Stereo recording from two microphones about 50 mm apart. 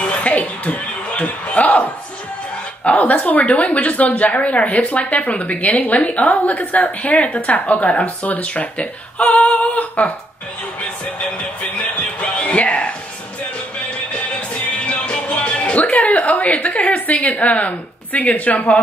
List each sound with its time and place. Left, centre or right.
0.0 s a sound: left
2.8 s a woman's voice: left
12.0 s music: left
14.9 s speech: left